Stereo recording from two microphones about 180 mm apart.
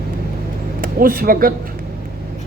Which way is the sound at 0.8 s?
55° right (ahead or behind).